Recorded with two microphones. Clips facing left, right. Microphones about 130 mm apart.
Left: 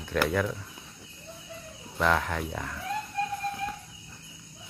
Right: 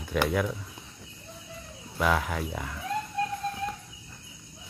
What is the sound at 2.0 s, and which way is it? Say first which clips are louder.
Speech: even; 5° right (ahead or behind).